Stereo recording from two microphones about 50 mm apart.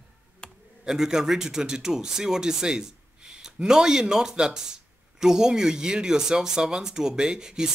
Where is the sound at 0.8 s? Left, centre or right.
Centre.